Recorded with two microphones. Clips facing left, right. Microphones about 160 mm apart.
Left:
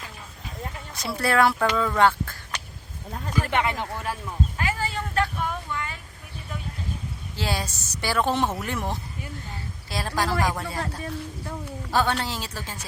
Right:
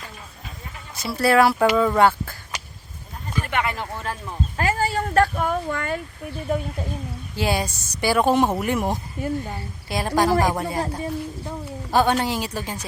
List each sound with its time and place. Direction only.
0.9 s speech: 5° right (ahead or behind)
3.5 s speech: 20° left (ahead or behind)
4.1 s speech: 10° left (ahead or behind)
4.5 s a sound: 45° right (ahead or behind)
7.3 s a woman's voice: 15° right (ahead or behind)